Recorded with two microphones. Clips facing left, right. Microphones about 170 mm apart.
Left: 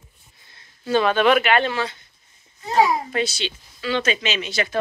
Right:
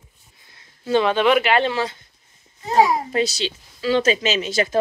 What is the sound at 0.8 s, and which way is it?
A child's voice, 20° right (ahead or behind).